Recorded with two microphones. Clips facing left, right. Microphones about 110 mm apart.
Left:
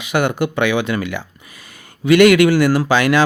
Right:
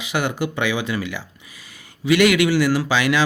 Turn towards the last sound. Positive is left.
turn(degrees=50)  # may be behind; listen again after turning